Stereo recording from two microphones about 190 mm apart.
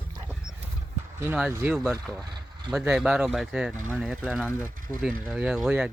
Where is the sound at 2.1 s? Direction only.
20° right (ahead or behind).